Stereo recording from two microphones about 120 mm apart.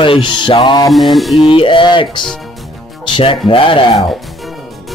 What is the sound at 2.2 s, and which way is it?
Speech, centre (ahead or behind).